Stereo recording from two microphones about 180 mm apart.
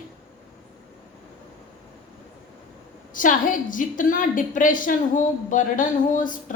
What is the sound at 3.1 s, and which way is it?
A woman's voice, 50° left (ahead or behind).